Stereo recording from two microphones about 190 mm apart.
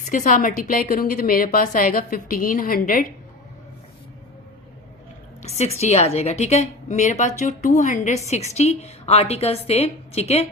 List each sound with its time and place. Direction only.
0.0 s a woman's voice: 45° left (ahead or behind)
5.4 s a sound: 35° left (ahead or behind)
5.8 s a woman's voice: 35° left (ahead or behind)